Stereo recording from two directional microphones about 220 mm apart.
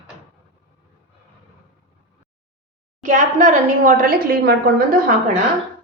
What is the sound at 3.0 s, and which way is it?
A woman's voice, 35° right (ahead or behind).